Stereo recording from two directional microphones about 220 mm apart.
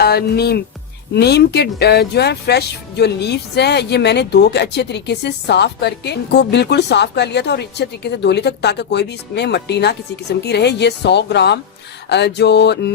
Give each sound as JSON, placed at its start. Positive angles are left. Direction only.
{"t": 0.0, "sound": "speech", "side_deg": 45}